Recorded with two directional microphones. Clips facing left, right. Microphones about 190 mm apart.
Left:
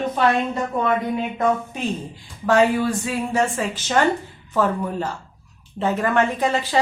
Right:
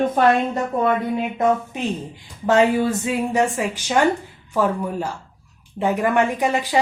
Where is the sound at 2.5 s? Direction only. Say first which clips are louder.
Right 1 dB; 25° right (ahead or behind).